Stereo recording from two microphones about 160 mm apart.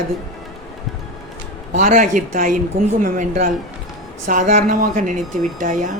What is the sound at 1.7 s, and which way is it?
A man's voice, 55° right (ahead or behind).